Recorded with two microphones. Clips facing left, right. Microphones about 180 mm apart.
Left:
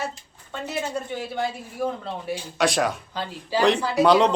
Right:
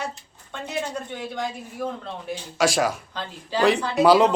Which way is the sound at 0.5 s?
5° left (ahead or behind).